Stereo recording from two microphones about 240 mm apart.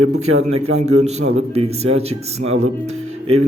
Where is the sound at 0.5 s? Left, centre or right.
Right.